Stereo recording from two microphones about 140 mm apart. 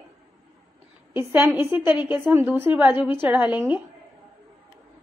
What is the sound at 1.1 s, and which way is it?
A woman's voice, 15° right (ahead or behind).